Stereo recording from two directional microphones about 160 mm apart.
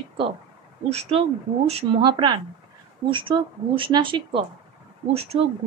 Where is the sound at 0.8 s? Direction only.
40° right (ahead or behind).